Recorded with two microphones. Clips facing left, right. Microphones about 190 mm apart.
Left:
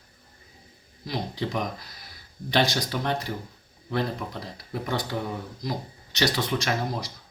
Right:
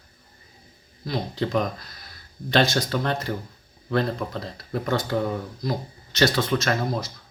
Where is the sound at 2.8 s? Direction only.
15° left (ahead or behind).